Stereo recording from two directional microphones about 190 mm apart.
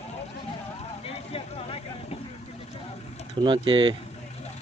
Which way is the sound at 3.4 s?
25° right (ahead or behind).